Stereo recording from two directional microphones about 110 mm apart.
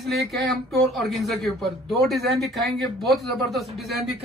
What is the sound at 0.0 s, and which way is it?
Speech, centre (ahead or behind).